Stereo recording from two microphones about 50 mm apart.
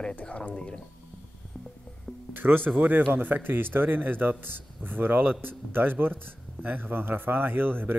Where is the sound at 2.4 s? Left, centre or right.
Right.